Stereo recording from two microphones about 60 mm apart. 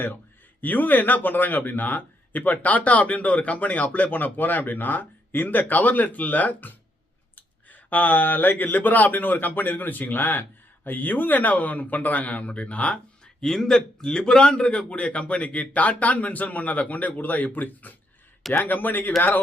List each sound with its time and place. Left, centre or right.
0.6 s speech: left
13.4 s a man's voice: centre; by 19.1 s left